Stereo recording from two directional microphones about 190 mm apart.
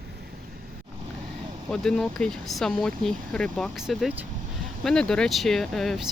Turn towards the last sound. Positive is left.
turn(degrees=0)  # may be behind; listen again after turning